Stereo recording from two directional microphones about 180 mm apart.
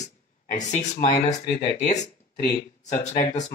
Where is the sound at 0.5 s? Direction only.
45° left (ahead or behind).